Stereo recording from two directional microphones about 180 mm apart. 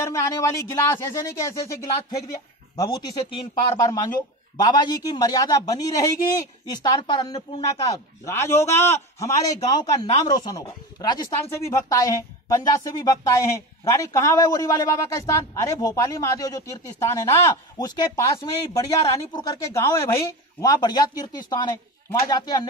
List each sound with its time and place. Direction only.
0.0 s a woman's voice: 15° left (ahead or behind)